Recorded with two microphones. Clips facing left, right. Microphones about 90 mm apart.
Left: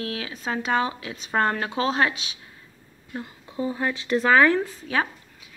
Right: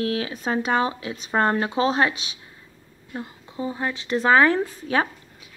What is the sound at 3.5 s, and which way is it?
Speech, 5° right (ahead or behind).